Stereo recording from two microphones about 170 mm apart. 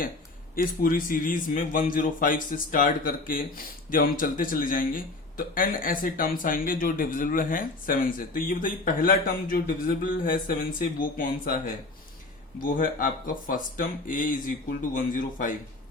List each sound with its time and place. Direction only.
0.5 s a man's voice: 55° left (ahead or behind)